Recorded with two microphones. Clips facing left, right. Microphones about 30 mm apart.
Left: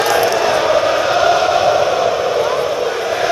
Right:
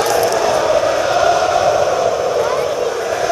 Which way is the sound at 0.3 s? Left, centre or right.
Left.